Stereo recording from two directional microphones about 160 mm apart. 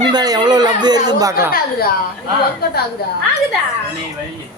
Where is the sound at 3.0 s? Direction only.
75° left (ahead or behind).